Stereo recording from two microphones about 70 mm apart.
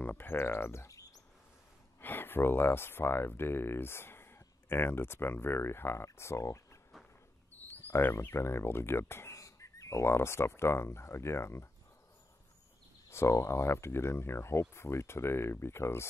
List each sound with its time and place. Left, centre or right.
0.0 s speech: left
2.0 s speech: left
7.5 s a sound: left
7.9 s speech: left
13.1 s speech: left